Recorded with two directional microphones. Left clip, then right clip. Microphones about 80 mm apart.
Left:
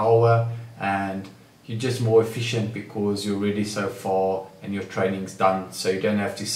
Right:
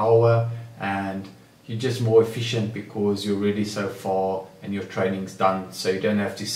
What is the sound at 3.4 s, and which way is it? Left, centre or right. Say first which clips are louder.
Speech: even; centre.